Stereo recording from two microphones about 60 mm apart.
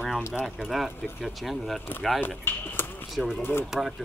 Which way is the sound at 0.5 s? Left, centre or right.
Centre.